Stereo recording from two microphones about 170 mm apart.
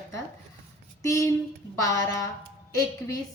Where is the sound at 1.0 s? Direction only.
20° left (ahead or behind).